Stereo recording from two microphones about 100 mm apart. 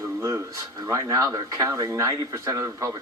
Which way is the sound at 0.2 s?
40° right (ahead or behind).